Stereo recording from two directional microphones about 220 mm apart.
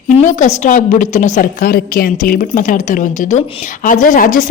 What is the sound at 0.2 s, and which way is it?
A woman's voice, 35° left (ahead or behind).